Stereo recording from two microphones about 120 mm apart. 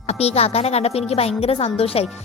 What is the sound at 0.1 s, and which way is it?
A woman's voice, 60° left (ahead or behind).